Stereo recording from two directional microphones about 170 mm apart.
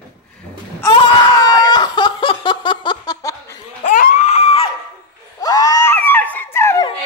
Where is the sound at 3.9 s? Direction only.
45° left (ahead or behind).